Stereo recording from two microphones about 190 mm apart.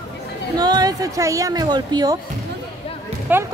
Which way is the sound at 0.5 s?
20° right (ahead or behind).